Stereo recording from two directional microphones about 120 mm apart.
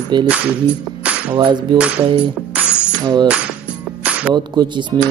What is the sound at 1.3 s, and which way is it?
Speech, 40° right (ahead or behind).